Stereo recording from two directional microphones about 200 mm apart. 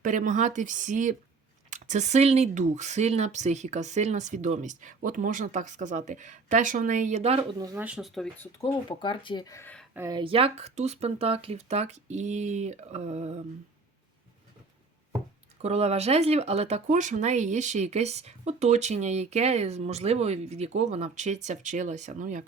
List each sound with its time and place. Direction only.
0.0 s speech: 40° right (ahead or behind)
7.6 s speech: 20° right (ahead or behind)
7.9 s speech: centre (ahead or behind)
8.6 s speech: 25° left (ahead or behind)
9.9 s speech: 15° right (ahead or behind)
10.2 s speech: 25° right (ahead or behind)
15.6 s speech: 30° right (ahead or behind)